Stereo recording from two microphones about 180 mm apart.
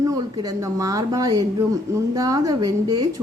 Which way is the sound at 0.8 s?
20° right (ahead or behind).